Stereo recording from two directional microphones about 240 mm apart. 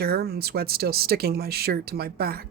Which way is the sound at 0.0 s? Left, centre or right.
Right.